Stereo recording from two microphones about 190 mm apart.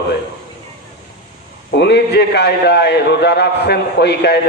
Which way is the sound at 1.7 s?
60° left (ahead or behind).